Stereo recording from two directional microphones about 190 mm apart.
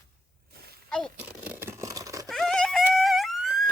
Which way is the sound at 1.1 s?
10° right (ahead or behind).